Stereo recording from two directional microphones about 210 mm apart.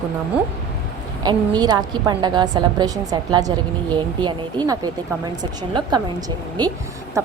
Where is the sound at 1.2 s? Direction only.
20° right (ahead or behind).